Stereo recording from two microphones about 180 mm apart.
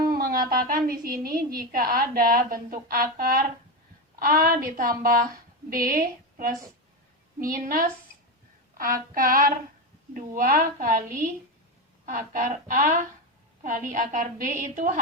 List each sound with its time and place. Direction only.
0.1 s a woman's voice: 55° right (ahead or behind)